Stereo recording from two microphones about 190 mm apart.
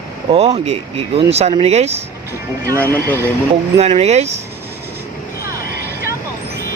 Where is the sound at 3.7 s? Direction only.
35° right (ahead or behind).